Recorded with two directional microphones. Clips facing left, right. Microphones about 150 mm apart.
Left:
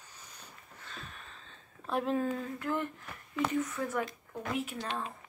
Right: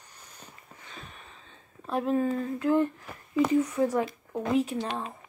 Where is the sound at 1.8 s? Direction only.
Centre (ahead or behind).